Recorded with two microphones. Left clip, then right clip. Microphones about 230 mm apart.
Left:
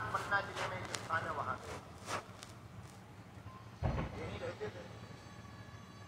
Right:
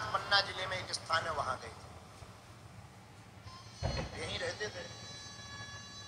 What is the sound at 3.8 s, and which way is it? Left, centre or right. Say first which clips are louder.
Vehicle: right 2 dB; right.